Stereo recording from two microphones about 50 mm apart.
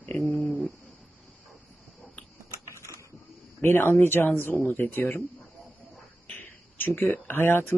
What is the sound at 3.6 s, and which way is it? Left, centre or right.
Speech, left.